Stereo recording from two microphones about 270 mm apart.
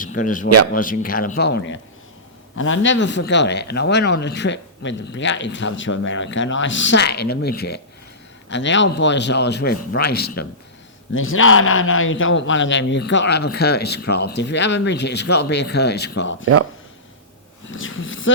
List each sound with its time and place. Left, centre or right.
0.0 s a man's voice: left
11.1 s a man's voice: left
17.7 s a sound: left